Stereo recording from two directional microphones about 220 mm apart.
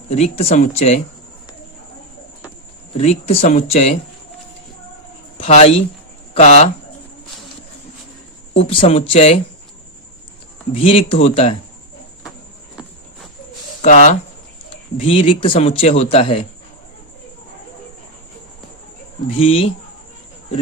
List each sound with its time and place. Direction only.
0.1 s speech: 30° left (ahead or behind)
3.0 s speech: 30° left (ahead or behind)
5.4 s speech: 30° left (ahead or behind)
8.5 s speech: 25° left (ahead or behind)
10.8 s speech: 25° left (ahead or behind)
13.8 s speech: 35° left (ahead or behind)
19.3 s speech: 25° left (ahead or behind)